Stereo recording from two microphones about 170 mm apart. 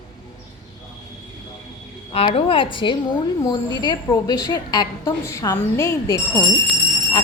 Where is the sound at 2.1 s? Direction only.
35° left (ahead or behind).